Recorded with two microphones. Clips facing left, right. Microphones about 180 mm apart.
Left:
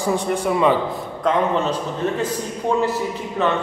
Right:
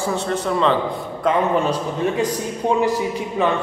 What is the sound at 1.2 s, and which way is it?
Speech, 10° right (ahead or behind).